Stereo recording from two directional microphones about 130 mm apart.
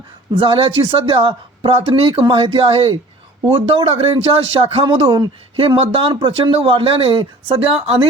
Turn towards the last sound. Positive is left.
turn(degrees=-50)  # may be behind; listen again after turning